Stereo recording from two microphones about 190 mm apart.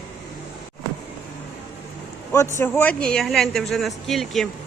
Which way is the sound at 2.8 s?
5° left (ahead or behind).